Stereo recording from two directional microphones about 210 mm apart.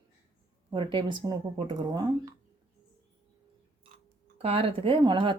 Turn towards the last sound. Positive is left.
turn(degrees=-20)  # may be behind; listen again after turning